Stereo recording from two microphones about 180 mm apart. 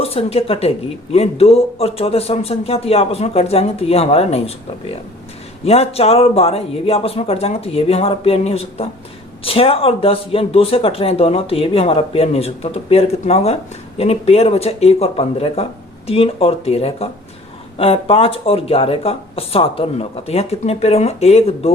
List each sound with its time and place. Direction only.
0.0 s speech: 35° left (ahead or behind)
5.6 s speech: 35° left (ahead or behind)